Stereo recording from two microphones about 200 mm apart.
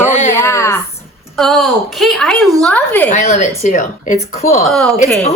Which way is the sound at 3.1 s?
35° left (ahead or behind).